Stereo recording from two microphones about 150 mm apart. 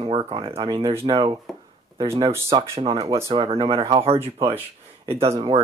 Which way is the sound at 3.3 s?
35° right (ahead or behind).